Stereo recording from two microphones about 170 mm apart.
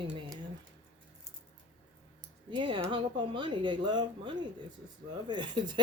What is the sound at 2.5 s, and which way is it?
Speech, 30° right (ahead or behind).